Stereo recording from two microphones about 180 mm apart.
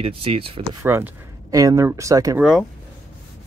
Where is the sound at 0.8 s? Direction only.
15° right (ahead or behind).